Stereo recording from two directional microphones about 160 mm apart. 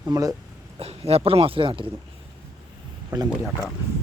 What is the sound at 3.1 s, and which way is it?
Speech, 10° right (ahead or behind).